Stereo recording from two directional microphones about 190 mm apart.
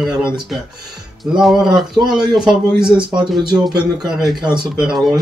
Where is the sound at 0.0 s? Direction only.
Centre (ahead or behind).